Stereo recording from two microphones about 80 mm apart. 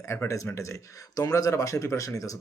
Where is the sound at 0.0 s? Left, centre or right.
Left.